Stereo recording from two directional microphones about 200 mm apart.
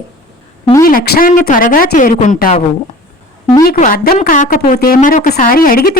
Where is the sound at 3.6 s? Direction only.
45° left (ahead or behind).